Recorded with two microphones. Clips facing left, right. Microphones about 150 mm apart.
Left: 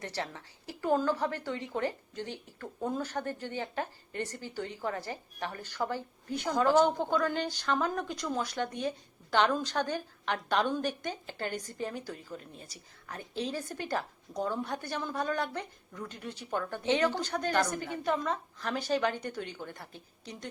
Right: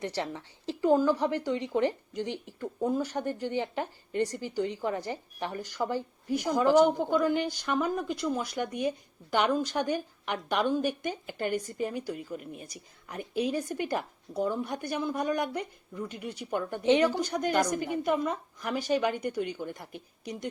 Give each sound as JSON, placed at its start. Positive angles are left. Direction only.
{"t": 0.0, "sound": "speech", "side_deg": -15}